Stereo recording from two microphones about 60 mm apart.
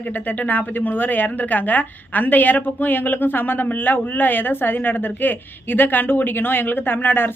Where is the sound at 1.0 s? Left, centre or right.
Left.